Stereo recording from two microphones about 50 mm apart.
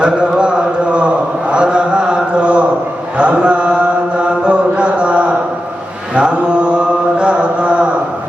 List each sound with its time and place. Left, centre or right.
0.0 s mantra: right
4.4 s chant: right
6.1 s mantra: right